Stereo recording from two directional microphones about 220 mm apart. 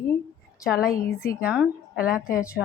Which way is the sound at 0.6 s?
Centre (ahead or behind).